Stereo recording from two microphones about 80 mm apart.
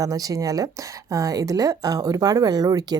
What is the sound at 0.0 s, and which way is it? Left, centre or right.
Speech, right.